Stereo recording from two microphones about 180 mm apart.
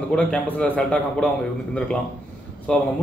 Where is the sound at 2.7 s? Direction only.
5° left (ahead or behind).